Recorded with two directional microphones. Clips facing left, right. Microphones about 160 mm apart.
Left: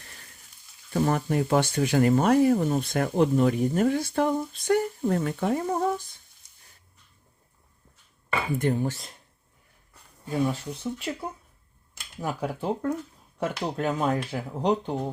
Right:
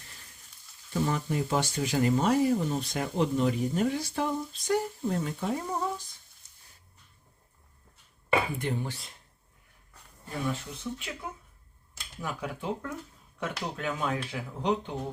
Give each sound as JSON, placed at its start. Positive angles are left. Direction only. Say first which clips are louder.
{"t": 0.9, "sound": "speech", "louder": "left 5 dB", "side_deg": 55}
{"t": 8.5, "sound": "speech", "louder": "left 7 dB", "side_deg": 45}
{"t": 10.4, "sound": "speech", "louder": "left 4 dB", "side_deg": 35}